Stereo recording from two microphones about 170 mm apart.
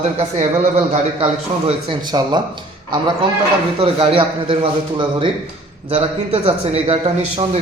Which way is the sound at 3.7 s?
35° right (ahead or behind).